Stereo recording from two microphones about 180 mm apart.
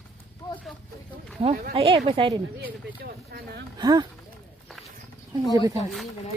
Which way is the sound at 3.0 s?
60° right (ahead or behind).